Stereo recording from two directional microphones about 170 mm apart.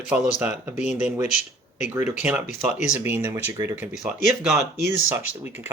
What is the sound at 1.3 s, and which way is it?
Speech, 45° left (ahead or behind).